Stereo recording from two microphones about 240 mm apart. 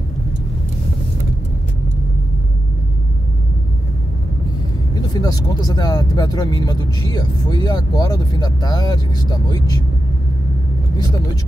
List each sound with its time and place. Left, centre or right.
5.1 s speech: centre